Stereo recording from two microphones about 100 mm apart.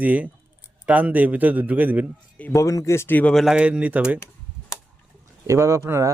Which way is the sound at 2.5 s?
30° left (ahead or behind).